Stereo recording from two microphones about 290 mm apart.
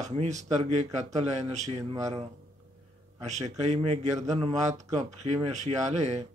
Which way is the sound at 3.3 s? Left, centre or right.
Right.